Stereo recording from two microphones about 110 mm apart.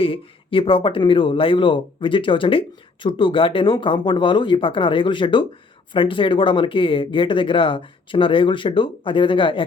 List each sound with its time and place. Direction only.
0.0 s speech: 55° left (ahead or behind)